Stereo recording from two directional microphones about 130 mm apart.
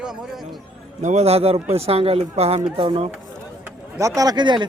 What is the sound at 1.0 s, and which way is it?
Speech, 55° right (ahead or behind).